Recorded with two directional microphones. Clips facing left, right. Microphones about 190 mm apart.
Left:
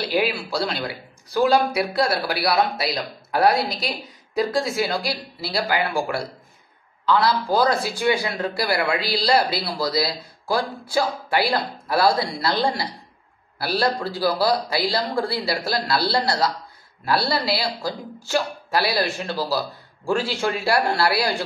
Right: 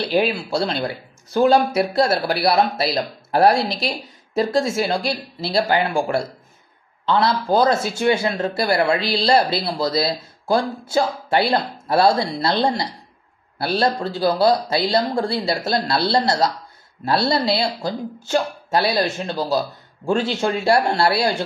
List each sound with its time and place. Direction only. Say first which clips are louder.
0.1 s speech: right 3 dB; 25° right (ahead or behind)
1.9 s speech: right 4 dB; 25° right (ahead or behind)